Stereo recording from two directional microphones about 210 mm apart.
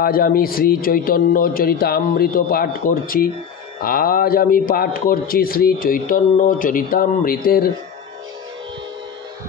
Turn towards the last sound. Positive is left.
turn(degrees=45)  # may be behind; listen again after turning